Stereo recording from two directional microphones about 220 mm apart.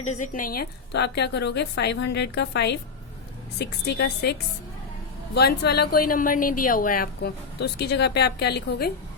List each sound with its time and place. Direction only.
0.0 s a woman's voice: 35° left (ahead or behind)